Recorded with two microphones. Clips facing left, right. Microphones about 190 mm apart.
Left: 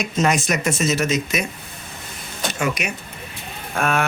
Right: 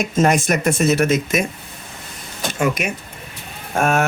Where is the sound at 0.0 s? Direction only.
50° right (ahead or behind).